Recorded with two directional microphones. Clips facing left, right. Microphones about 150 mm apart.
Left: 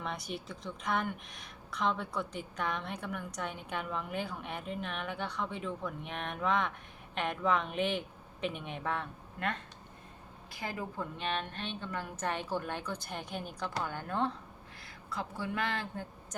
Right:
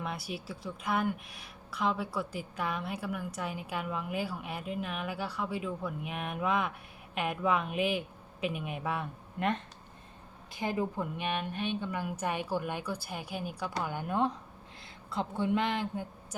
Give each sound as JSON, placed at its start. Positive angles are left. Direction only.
{"t": 0.0, "sound": "a woman's voice", "side_deg": -5}
{"t": 9.4, "sound": "a woman's voice", "side_deg": -20}
{"t": 15.1, "sound": "speech", "side_deg": -25}